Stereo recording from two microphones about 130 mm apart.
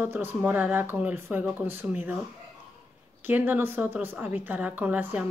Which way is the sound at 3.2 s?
15° right (ahead or behind).